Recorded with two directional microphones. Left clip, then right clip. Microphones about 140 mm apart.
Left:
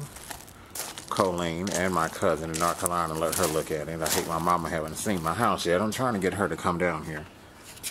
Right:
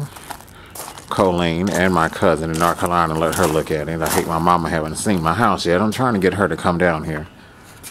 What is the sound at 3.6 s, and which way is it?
Speech, 15° right (ahead or behind).